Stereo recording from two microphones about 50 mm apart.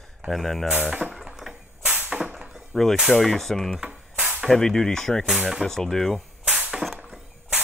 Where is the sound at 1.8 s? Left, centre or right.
Right.